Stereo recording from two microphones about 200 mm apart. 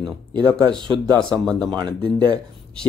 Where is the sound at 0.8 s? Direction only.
25° right (ahead or behind).